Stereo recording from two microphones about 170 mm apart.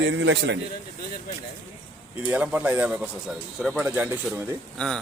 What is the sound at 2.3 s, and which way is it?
Speech, 5° right (ahead or behind).